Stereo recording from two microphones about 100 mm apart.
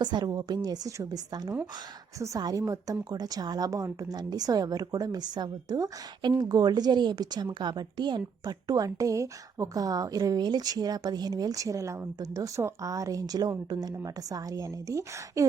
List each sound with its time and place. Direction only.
0.0 s a woman's voice: 45° right (ahead or behind)